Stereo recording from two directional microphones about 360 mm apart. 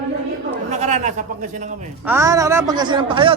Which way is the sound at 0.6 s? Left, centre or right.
Centre.